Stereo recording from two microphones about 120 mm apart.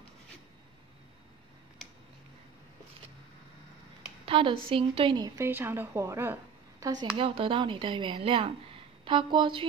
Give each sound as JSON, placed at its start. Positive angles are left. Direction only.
{"t": 4.3, "sound": "speech", "side_deg": -50}
{"t": 5.4, "sound": "a woman's voice", "side_deg": -20}
{"t": 7.2, "sound": "speech", "side_deg": -45}